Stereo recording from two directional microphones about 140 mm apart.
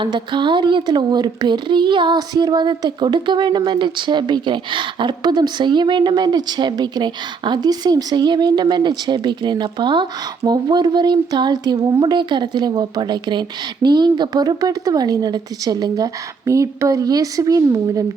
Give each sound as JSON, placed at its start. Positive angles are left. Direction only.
{"t": 0.0, "sound": "a woman's voice", "side_deg": -35}